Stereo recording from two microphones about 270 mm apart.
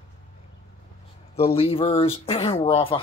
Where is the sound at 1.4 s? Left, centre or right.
Left.